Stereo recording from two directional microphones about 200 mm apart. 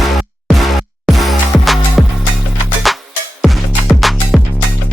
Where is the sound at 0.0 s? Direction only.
Centre (ahead or behind).